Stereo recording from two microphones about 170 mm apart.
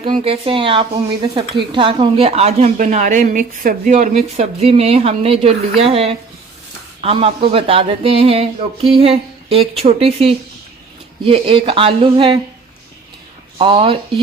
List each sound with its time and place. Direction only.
0.2 s speech: 35° right (ahead or behind)
13.6 s speech: 30° right (ahead or behind)